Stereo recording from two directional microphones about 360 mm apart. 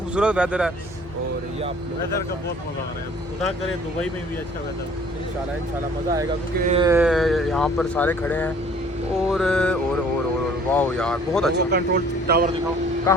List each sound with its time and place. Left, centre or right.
0.1 s speech: centre
6.6 s speech: centre
11.5 s speech: right
13.1 s speech: centre